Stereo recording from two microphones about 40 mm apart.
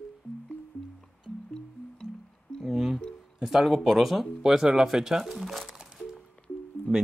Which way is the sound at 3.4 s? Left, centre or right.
Centre.